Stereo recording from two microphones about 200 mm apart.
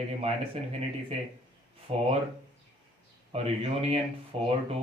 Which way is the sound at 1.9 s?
30° right (ahead or behind).